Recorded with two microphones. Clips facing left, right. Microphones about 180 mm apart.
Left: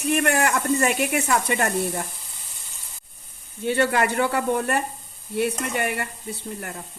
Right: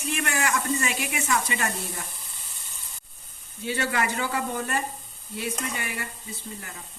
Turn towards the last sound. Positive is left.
turn(degrees=60)  # may be behind; listen again after turning